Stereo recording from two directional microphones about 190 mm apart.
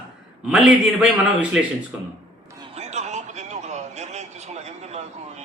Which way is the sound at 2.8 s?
35° right (ahead or behind).